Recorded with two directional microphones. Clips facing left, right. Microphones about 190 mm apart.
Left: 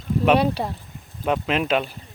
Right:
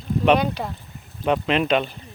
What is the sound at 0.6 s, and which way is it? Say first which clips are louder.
Speech: left 2 dB; 25° left (ahead or behind).